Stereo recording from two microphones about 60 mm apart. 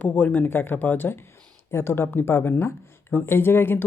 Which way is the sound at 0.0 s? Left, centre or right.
Left.